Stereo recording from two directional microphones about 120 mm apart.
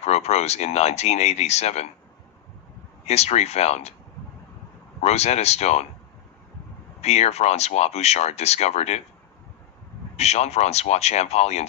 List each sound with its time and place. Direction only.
0.0 s speech: 65° left (ahead or behind)
3.1 s speech: 65° left (ahead or behind)
5.0 s speech: 65° left (ahead or behind)
7.0 s speech: 65° left (ahead or behind)
10.1 s speech: 65° left (ahead or behind)